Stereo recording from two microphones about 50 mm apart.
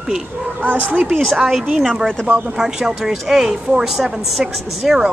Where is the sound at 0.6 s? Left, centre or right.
Right.